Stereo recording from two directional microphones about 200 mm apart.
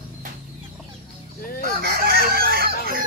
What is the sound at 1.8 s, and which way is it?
Chicken, 50° right (ahead or behind).